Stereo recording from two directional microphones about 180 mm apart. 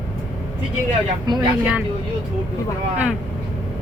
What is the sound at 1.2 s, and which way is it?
Speech, 25° right (ahead or behind).